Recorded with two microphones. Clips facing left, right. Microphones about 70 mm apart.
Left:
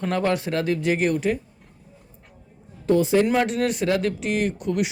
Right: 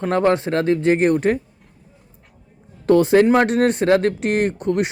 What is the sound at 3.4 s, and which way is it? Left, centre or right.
Speech, right.